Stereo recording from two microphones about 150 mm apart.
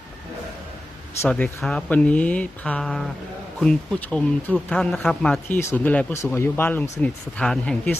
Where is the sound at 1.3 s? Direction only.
10° left (ahead or behind).